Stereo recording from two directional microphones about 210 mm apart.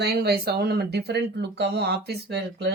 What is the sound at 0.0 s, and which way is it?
Speech, 50° right (ahead or behind).